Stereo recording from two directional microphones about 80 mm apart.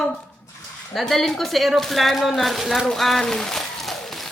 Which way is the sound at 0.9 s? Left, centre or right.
Centre.